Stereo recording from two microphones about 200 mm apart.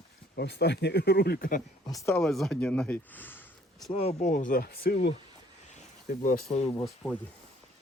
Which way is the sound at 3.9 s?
30° left (ahead or behind).